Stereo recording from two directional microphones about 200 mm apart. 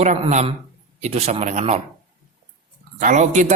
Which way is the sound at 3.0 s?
40° right (ahead or behind).